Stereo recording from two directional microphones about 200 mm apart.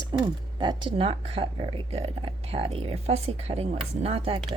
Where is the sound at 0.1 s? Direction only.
20° right (ahead or behind).